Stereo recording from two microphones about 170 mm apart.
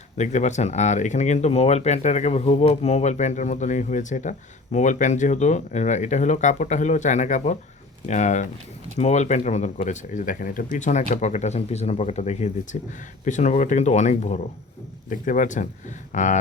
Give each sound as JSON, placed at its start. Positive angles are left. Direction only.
{"t": 0.2, "sound": "speech", "side_deg": 45}